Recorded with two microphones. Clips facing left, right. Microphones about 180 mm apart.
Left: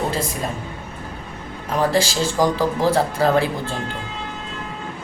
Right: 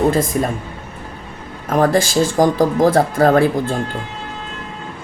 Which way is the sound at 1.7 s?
50° right (ahead or behind).